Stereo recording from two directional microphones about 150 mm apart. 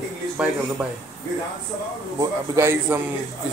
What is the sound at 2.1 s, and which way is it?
Speech, 15° right (ahead or behind).